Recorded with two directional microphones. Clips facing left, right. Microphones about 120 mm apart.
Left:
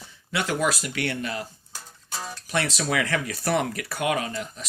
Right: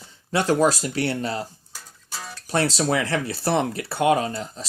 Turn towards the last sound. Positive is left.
turn(degrees=-30)  # may be behind; listen again after turning